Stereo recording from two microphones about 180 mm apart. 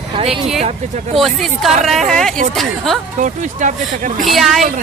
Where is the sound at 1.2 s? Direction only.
Centre (ahead or behind).